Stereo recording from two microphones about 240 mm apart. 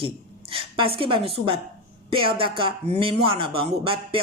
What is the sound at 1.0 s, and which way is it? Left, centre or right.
Speech, right.